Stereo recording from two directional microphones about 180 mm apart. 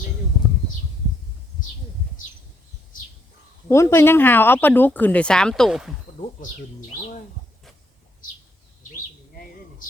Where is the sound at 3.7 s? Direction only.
15° left (ahead or behind); by 5.9 s centre (ahead or behind).